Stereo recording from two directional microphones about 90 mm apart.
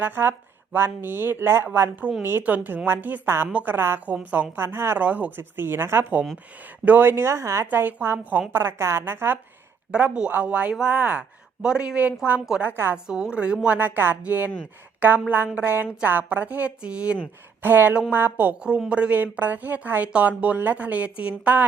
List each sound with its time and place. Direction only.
0.0 s a woman's voice: 25° right (ahead or behind)
7.7 s a woman's voice: 20° right (ahead or behind)
9.9 s speech: 15° right (ahead or behind)
12.7 s a woman's voice: 25° right (ahead or behind)
13.1 s a woman's voice: 10° right (ahead or behind)